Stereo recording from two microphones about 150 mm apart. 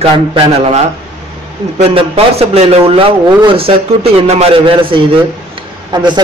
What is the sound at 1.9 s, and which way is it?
A man's voice, 40° right (ahead or behind).